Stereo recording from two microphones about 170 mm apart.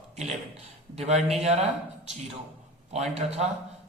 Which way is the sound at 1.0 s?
40° right (ahead or behind).